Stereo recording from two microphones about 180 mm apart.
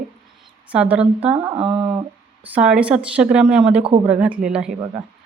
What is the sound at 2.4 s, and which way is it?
A woman's voice, 5° right (ahead or behind).